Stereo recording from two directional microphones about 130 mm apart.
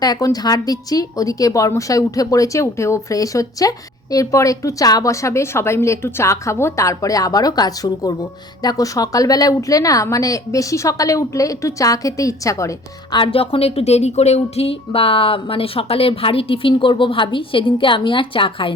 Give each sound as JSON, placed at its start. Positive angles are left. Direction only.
{"t": 0.0, "sound": "a woman's voice", "side_deg": 30}
{"t": 13.1, "sound": "a woman's voice", "side_deg": 45}